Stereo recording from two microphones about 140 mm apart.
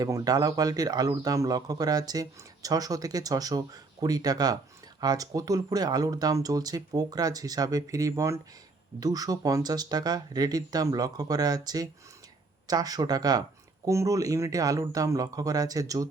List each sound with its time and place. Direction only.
0.0 s a man's voice: 25° right (ahead or behind)